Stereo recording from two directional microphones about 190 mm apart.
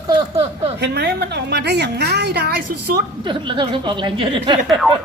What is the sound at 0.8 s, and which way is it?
A woman's voice, 60° right (ahead or behind).